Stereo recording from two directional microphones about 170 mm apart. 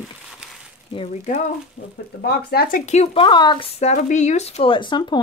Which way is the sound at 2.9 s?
40° left (ahead or behind).